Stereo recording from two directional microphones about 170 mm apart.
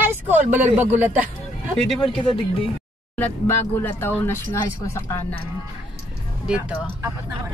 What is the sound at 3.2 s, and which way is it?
Speech, 10° left (ahead or behind).